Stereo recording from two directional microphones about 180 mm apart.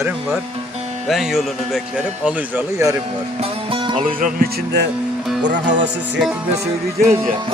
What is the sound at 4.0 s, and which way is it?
Music, 50° right (ahead or behind).